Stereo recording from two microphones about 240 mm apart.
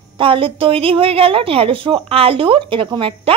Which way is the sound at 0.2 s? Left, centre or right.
Right.